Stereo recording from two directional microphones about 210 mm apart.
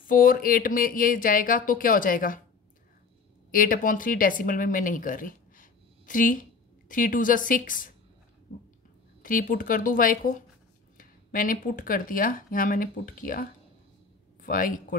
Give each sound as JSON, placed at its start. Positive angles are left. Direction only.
{"t": 0.0, "sound": "speech", "side_deg": 40}
{"t": 3.5, "sound": "speech", "side_deg": 40}
{"t": 9.2, "sound": "speech", "side_deg": 40}